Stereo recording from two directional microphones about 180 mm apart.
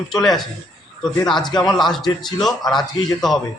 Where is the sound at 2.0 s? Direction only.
25° left (ahead or behind).